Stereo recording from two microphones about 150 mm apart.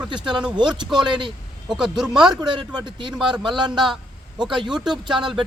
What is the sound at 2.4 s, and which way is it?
A man's voice, 30° right (ahead or behind).